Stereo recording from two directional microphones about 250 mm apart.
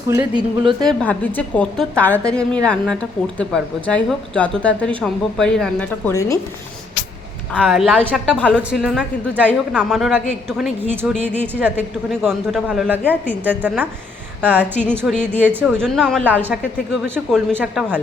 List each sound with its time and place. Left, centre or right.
0.1 s a woman's voice: centre
0.8 s a woman's voice: centre
7.5 s a woman's voice: centre